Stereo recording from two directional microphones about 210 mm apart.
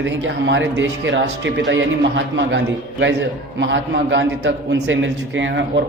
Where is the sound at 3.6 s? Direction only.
60° right (ahead or behind).